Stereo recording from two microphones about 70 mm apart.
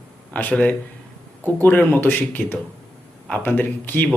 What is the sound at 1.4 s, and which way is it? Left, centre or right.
Speech, left.